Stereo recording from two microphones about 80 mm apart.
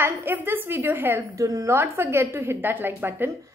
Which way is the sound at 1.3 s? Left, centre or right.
Right.